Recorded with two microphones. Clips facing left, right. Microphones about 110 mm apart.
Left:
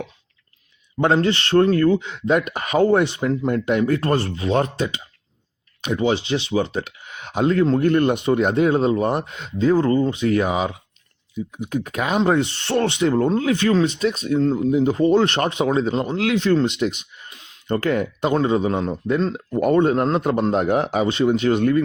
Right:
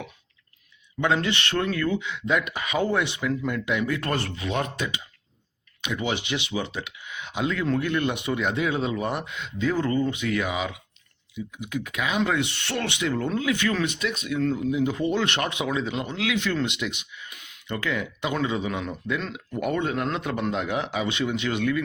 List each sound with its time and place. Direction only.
0.9 s speech: 45° left (ahead or behind)
17.3 s a sound: 30° left (ahead or behind)
17.7 s speech: 45° left (ahead or behind)